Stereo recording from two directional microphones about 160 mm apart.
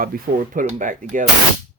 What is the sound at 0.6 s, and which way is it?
Speech, 55° right (ahead or behind).